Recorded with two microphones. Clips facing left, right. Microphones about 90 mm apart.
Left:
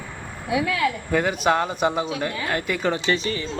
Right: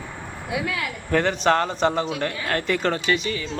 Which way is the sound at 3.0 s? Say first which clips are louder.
Even; 35° left (ahead or behind).